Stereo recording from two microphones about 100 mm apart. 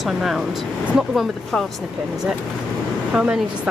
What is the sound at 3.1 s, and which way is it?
Speech, 10° right (ahead or behind).